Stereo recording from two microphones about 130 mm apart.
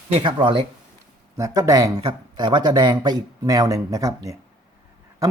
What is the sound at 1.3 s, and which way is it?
A man's voice, 25° right (ahead or behind).